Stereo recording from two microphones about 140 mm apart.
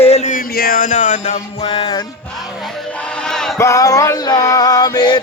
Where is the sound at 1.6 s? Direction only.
35° left (ahead or behind).